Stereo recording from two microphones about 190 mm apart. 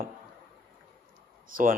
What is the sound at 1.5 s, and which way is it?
Speech, 45° right (ahead or behind).